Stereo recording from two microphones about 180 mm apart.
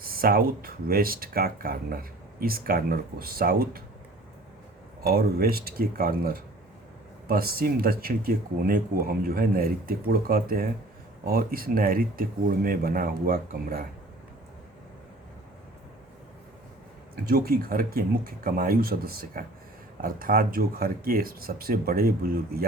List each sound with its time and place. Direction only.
0.0 s speech: 55° right (ahead or behind)
5.0 s speech: 60° right (ahead or behind)
17.2 s speech: 55° right (ahead or behind)